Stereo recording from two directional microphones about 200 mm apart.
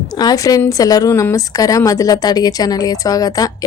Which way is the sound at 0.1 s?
20° left (ahead or behind).